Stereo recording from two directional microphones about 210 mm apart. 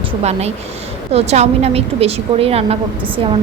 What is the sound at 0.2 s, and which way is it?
A woman's voice, 30° right (ahead or behind).